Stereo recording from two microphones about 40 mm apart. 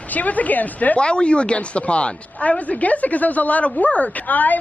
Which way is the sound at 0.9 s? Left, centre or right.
Left.